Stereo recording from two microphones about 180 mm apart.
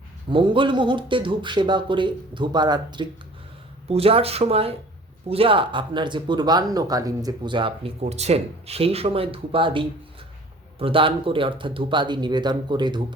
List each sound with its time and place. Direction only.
0.3 s speech: 25° right (ahead or behind)
8.0 s speech: 35° right (ahead or behind)